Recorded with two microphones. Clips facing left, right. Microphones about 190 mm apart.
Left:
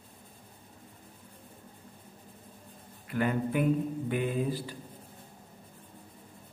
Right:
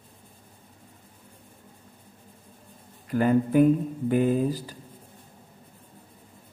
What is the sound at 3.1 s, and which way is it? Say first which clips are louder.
Speech: right 7 dB; 40° right (ahead or behind).